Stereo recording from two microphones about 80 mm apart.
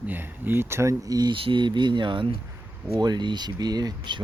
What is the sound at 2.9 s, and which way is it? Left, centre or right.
Speech, right.